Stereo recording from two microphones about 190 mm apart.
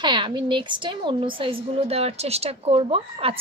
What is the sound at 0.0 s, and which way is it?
A woman's voice, 25° right (ahead or behind).